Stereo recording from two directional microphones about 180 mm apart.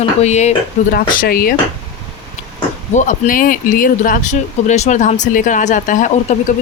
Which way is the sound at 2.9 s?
45° left (ahead or behind).